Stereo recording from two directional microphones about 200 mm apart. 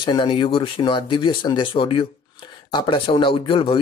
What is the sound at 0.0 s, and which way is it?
Speech, 25° left (ahead or behind).